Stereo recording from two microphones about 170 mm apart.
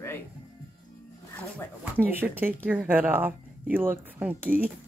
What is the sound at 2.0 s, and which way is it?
Speech, 10° right (ahead or behind).